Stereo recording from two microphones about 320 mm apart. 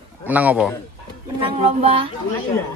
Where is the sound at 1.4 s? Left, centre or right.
Centre.